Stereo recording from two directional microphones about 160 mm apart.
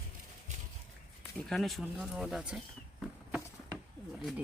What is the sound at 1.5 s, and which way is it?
Speech, centre (ahead or behind).